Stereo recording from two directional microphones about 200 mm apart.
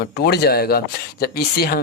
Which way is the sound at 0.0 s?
50° left (ahead or behind).